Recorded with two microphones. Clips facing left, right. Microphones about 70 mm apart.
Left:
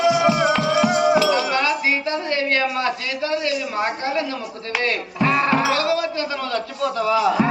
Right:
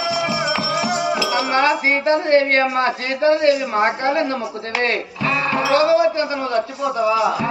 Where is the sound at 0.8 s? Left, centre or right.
Left.